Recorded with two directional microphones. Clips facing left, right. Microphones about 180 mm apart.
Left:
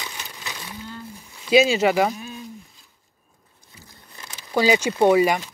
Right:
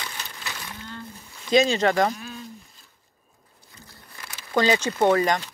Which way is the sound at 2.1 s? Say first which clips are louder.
Left 2 dB; 20° left (ahead or behind).